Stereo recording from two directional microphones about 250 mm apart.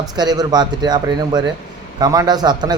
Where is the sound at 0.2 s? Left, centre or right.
Centre.